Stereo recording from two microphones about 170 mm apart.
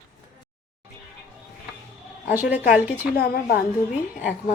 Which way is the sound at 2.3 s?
10° right (ahead or behind).